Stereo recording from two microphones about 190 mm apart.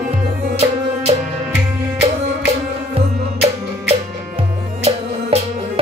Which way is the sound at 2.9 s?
30° right (ahead or behind).